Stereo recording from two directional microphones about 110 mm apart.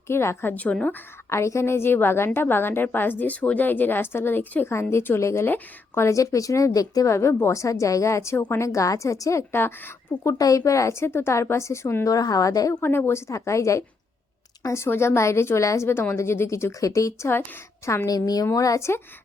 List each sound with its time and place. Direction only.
0.1 s a woman's voice: 25° left (ahead or behind)
1.3 s a woman's voice: 25° left (ahead or behind)
10.3 s a woman's voice: 30° left (ahead or behind)
12.1 s a woman's voice: 35° left (ahead or behind)
12.8 s a woman's voice: 20° left (ahead or behind)